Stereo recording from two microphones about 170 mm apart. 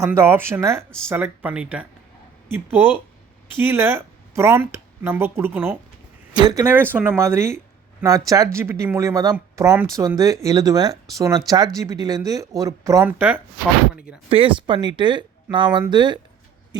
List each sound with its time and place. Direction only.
0.0 s speech: 15° right (ahead or behind)
14.3 s speech: 35° right (ahead or behind)